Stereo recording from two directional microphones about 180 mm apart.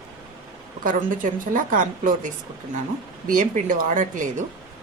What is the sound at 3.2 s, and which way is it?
Speech, 45° right (ahead or behind).